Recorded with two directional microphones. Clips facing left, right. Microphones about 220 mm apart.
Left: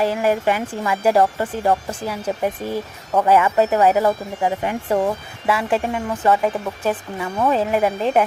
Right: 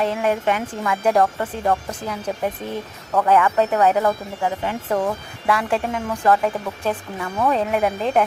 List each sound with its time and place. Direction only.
0.0 s speech: 5° left (ahead or behind)
5.5 s speech: 5° left (ahead or behind)